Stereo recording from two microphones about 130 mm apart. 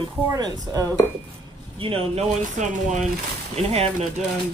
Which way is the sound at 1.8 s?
45° right (ahead or behind).